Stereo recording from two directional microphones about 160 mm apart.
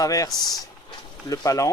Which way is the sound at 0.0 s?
20° left (ahead or behind).